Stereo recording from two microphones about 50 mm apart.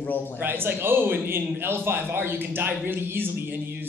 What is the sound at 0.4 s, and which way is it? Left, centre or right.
A man's voice, right.